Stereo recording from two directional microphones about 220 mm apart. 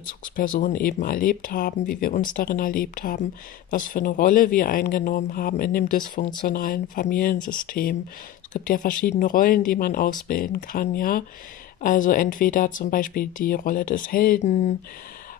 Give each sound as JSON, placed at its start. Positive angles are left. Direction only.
{"t": 0.0, "sound": "speech", "side_deg": 40}
{"t": 8.6, "sound": "speech", "side_deg": 40}